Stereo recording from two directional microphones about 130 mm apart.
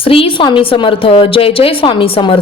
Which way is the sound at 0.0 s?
45° left (ahead or behind).